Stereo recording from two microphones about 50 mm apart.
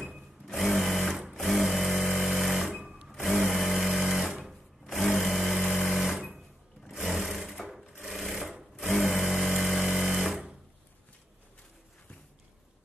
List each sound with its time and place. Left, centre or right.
0.5 s sewing machine: centre